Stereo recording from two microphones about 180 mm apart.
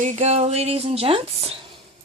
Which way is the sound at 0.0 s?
40° right (ahead or behind).